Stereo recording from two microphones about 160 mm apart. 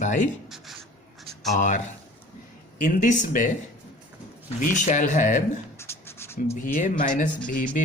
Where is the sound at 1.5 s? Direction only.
50° left (ahead or behind).